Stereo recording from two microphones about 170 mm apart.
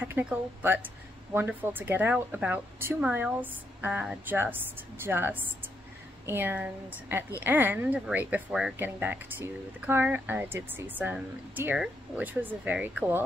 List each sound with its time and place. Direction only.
0.0 s speech: 10° right (ahead or behind)